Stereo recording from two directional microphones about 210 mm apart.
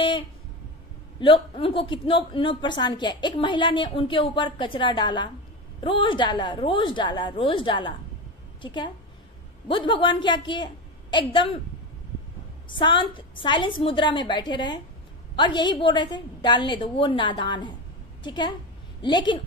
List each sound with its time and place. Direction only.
1.2 s a woman's voice: 25° left (ahead or behind)
12.6 s a woman's voice: 20° left (ahead or behind)